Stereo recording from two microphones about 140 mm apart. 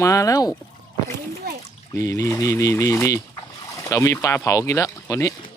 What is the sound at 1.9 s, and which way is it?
Speech, 25° left (ahead or behind).